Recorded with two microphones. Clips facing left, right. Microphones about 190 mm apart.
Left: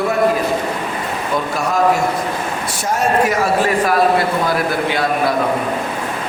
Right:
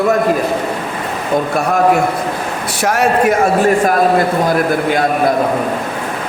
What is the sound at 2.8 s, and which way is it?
A man's voice, 70° right (ahead or behind).